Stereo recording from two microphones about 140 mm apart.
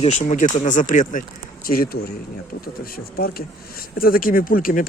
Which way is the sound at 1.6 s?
90° left.